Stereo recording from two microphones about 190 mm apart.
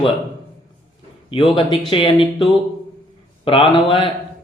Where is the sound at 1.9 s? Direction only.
25° left (ahead or behind).